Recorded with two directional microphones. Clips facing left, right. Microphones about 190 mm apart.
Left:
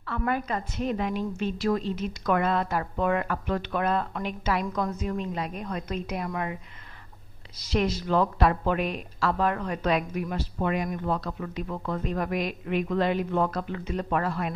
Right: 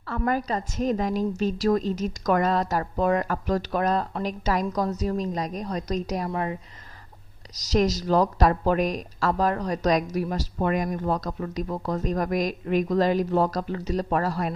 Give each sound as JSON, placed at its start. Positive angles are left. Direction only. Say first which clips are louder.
{"t": 0.0, "sound": "a woman's voice", "louder": "right 3 dB", "side_deg": -40}
{"t": 7.7, "sound": "a woman's voice", "louder": "right 3 dB", "side_deg": -40}